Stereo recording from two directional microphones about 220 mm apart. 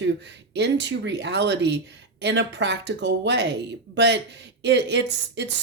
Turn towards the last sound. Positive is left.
turn(degrees=-50)  # may be behind; listen again after turning